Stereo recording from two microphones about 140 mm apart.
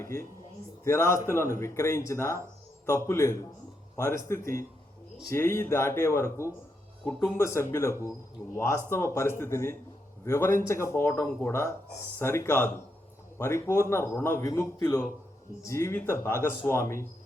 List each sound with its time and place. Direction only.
0.9 s a man's voice: 20° left (ahead or behind)